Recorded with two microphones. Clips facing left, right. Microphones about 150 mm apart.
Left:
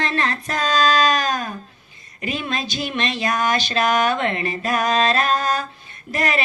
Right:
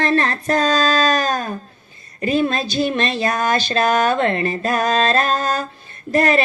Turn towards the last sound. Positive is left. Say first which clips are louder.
# right 7 dB
turn(degrees=-35)  # may be behind; listen again after turning